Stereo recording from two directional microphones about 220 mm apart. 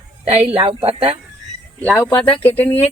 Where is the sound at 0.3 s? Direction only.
30° right (ahead or behind).